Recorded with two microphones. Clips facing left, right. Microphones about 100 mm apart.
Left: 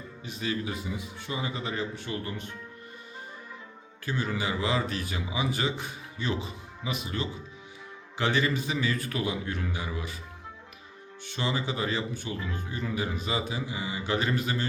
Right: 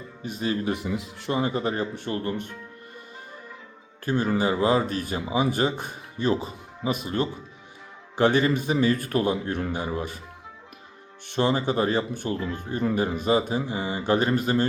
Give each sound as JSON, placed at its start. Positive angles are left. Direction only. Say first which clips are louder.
{"t": 0.2, "sound": "speech", "louder": "right 5 dB", "side_deg": -45}
{"t": 0.7, "sound": "speech", "louder": "right 7 dB", "side_deg": -65}
{"t": 1.3, "sound": "speech", "louder": "right 8 dB", "side_deg": -50}
{"t": 4.0, "sound": "speech", "louder": "right 7 dB", "side_deg": -45}
{"t": 11.3, "sound": "speech", "louder": "right 8 dB", "side_deg": -45}